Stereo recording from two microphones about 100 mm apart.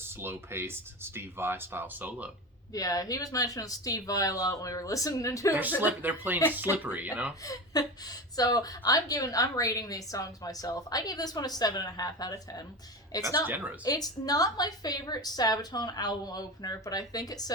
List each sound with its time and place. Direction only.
0.0 s speech: 25° right (ahead or behind)
2.7 s a woman's voice: 35° left (ahead or behind)
5.8 s speech: 15° right (ahead or behind)
7.4 s a woman's voice: 35° left (ahead or behind)